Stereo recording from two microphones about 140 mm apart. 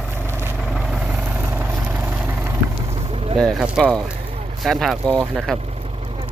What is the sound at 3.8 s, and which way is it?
Speech, 5° left (ahead or behind).